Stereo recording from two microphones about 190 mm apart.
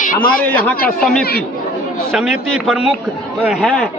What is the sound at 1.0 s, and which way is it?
A man's voice, centre (ahead or behind).